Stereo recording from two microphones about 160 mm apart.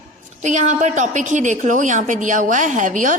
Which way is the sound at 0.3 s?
50° right (ahead or behind).